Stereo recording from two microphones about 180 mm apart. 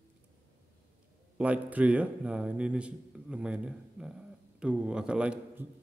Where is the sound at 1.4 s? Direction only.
10° right (ahead or behind).